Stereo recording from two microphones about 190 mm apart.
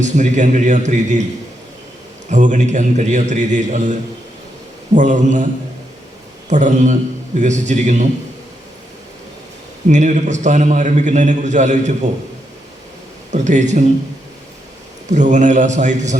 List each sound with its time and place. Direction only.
0.0 s a man's voice: 40° right (ahead or behind)
2.3 s a man's voice: 40° right (ahead or behind)
4.9 s a man's voice: 40° right (ahead or behind)
6.5 s a man's voice: 40° right (ahead or behind)
9.9 s a man's voice: 40° right (ahead or behind)
13.3 s a man's voice: 40° right (ahead or behind)
15.1 s a man's voice: 40° right (ahead or behind)